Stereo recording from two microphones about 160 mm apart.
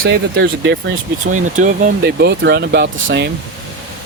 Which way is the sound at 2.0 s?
90° right.